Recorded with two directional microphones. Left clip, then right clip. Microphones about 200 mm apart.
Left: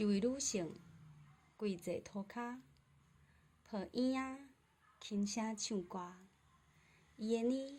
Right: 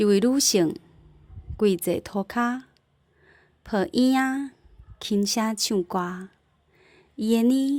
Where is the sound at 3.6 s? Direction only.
45° right (ahead or behind).